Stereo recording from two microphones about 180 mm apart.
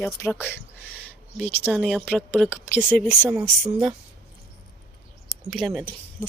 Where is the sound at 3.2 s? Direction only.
20° right (ahead or behind).